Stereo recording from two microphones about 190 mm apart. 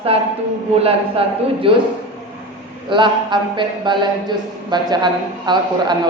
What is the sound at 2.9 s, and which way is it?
A woman's voice, 25° right (ahead or behind).